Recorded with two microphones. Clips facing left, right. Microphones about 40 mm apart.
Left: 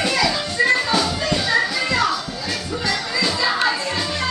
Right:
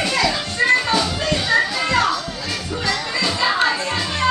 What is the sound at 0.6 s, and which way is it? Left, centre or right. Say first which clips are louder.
Music: right 1 dB; centre.